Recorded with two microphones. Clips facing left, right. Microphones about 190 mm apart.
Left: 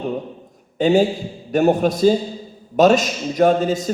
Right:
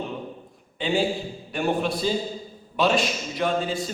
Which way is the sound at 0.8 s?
45° left (ahead or behind).